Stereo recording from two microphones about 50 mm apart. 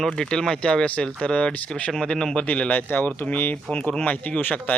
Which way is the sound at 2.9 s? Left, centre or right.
Left.